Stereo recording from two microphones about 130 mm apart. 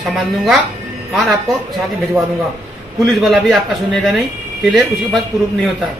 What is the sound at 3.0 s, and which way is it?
Speech, centre (ahead or behind).